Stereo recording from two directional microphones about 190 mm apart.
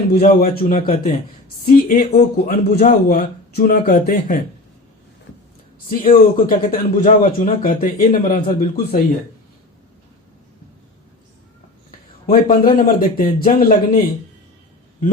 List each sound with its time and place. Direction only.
0.1 s a man's voice: 40° left (ahead or behind)
4.0 s a man's voice: 35° left (ahead or behind)
5.9 s a man's voice: 50° left (ahead or behind)
11.9 s a man's voice: 50° left (ahead or behind)